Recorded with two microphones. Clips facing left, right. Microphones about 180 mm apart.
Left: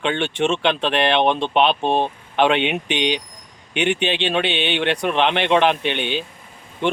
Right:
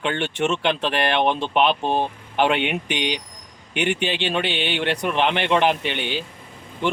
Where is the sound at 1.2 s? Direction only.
20° left (ahead or behind).